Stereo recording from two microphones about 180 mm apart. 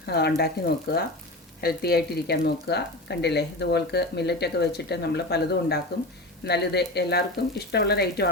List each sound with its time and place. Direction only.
0.0 s speech: 65° left (ahead or behind)